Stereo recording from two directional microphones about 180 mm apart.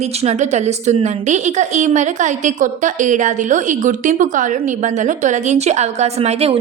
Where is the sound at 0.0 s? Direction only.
35° right (ahead or behind).